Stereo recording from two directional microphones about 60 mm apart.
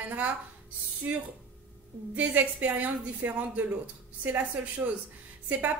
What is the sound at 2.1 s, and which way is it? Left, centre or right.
A woman's voice, right.